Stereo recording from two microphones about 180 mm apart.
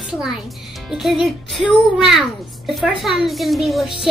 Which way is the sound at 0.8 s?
Centre (ahead or behind).